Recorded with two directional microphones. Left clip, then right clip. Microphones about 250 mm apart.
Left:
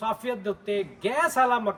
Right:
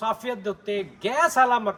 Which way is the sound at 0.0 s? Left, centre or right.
Centre.